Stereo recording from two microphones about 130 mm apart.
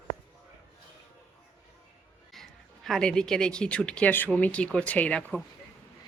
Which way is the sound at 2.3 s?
Centre (ahead or behind).